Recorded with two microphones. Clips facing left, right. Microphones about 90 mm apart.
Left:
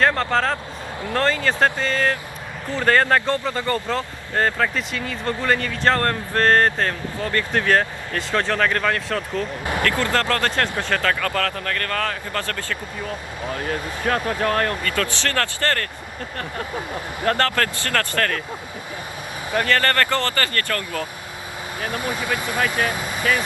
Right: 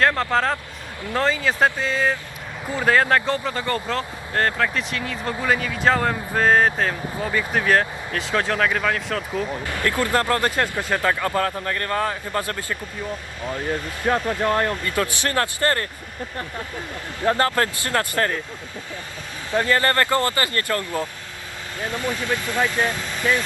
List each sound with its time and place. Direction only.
0.0 s speech: centre (ahead or behind)
9.8 s speech: 15° right (ahead or behind)
14.0 s speech: 15° right (ahead or behind)
17.2 s speech: 20° right (ahead or behind)
19.6 s speech: 20° right (ahead or behind)
21.8 s speech: 10° left (ahead or behind)